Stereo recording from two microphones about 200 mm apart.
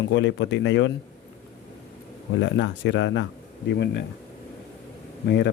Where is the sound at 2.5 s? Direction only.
65° left (ahead or behind).